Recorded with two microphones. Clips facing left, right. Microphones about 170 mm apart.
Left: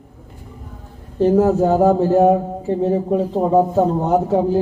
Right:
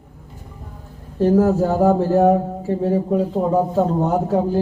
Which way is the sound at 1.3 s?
20° left (ahead or behind).